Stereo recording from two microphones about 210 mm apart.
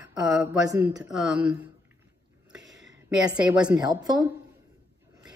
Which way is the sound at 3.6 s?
20° right (ahead or behind).